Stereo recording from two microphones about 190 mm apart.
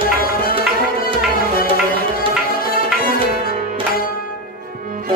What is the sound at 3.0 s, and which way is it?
Music, 50° left (ahead or behind).